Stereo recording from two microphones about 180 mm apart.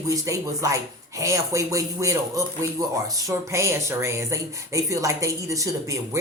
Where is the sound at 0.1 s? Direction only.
15° right (ahead or behind).